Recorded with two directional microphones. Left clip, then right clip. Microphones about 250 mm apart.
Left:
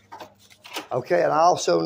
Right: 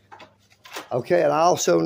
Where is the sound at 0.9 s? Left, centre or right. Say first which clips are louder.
Right 1 dB; right.